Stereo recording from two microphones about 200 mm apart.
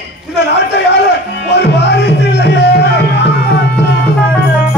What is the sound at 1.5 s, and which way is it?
Music, 60° left (ahead or behind).